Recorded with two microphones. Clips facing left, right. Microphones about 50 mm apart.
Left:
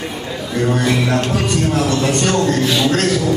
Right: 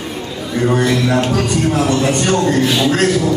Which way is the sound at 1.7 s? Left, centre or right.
Centre.